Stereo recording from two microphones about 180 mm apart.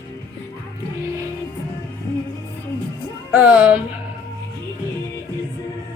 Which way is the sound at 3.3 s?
5° right (ahead or behind).